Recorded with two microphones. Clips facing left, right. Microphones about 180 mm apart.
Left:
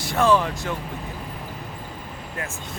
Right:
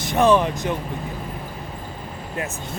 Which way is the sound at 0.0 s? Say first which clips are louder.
Right 3 dB; 20° right (ahead or behind).